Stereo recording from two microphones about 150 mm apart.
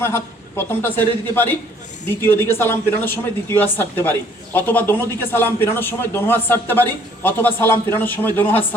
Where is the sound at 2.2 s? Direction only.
15° left (ahead or behind).